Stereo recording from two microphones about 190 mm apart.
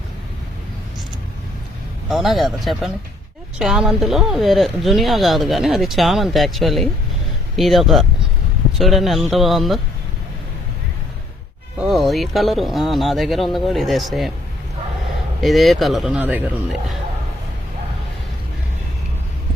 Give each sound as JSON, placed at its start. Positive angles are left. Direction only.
{"t": 2.0, "sound": "speech", "side_deg": 0}
{"t": 11.8, "sound": "speech", "side_deg": 0}
{"t": 15.4, "sound": "speech", "side_deg": 0}